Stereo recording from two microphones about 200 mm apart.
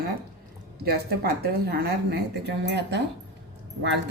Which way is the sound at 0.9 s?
50° right (ahead or behind).